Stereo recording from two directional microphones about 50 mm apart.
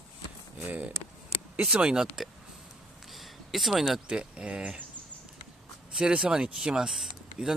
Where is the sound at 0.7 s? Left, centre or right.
Right.